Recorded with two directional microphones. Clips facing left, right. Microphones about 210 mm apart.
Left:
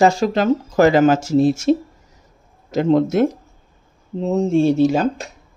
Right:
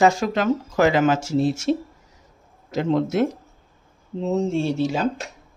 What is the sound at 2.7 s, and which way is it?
Speech, 45° left (ahead or behind).